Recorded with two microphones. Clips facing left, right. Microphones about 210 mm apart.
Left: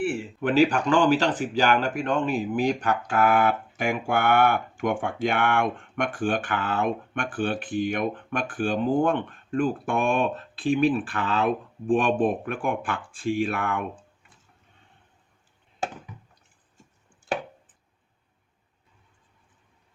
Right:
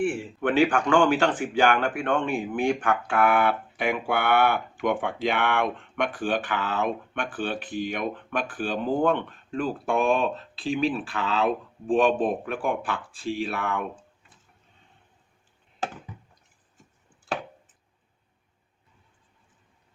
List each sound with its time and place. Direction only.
0.4 s speech: 40° left (ahead or behind)